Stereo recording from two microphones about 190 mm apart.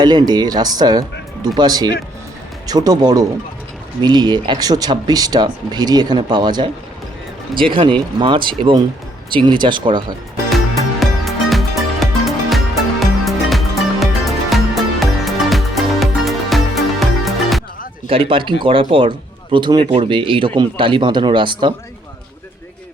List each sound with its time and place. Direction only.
0.0 s speech: 20° right (ahead or behind)
11.0 s music: centre (ahead or behind)
18.1 s speech: 30° right (ahead or behind)